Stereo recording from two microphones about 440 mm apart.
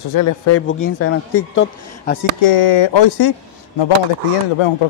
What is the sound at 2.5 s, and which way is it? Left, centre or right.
Speech, left.